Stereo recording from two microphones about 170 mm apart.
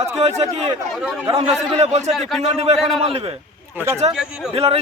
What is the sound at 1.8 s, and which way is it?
Speech, 40° right (ahead or behind).